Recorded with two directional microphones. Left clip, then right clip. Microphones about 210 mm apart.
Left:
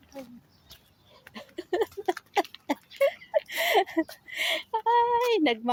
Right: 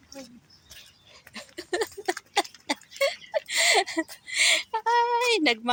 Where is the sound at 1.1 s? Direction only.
15° left (ahead or behind).